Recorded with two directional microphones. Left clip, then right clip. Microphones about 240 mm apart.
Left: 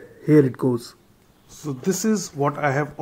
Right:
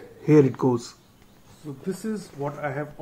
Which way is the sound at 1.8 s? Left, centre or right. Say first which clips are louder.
Left 9 dB; left.